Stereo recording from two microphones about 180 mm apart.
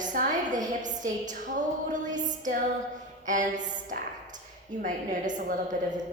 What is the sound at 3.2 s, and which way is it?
A woman's voice, 45° right (ahead or behind).